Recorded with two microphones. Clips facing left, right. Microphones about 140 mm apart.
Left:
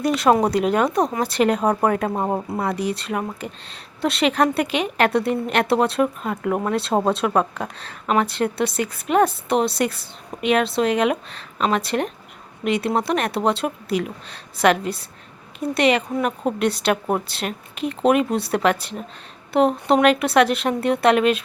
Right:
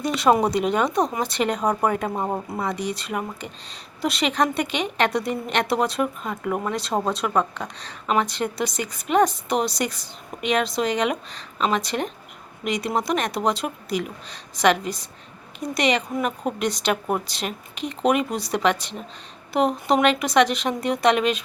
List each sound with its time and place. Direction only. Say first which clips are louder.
0.0 s speech: left 2 dB; centre (ahead or behind)
6.7 s speech: left 6 dB; 35° left (ahead or behind)
7.6 s speech: left 3 dB; 5° left (ahead or behind)